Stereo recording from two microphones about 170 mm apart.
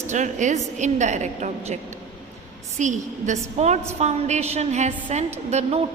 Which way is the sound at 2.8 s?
45° right (ahead or behind).